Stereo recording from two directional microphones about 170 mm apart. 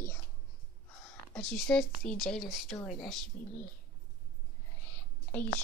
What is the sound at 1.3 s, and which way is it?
Speech, 5° left (ahead or behind).